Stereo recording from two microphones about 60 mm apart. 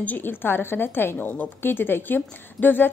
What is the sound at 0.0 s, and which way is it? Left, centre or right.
A woman's voice, left.